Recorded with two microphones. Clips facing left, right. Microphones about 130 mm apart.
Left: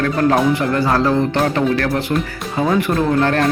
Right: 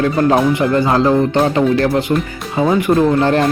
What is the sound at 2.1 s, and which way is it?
Speech, 10° right (ahead or behind).